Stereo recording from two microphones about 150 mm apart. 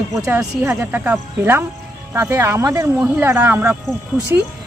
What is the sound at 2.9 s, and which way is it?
Speech, 10° right (ahead or behind).